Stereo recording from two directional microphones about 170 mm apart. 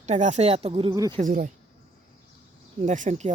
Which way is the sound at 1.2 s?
50° right (ahead or behind).